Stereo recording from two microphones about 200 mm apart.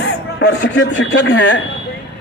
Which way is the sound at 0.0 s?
60° left (ahead or behind).